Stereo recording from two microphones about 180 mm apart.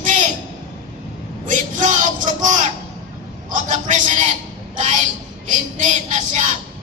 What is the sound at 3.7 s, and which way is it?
Speech, 45° right (ahead or behind).